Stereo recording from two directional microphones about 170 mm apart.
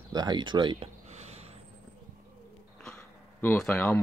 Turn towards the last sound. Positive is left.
turn(degrees=10)  # may be behind; listen again after turning